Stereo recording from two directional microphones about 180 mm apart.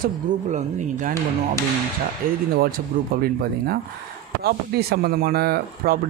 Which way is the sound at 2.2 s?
55° right (ahead or behind).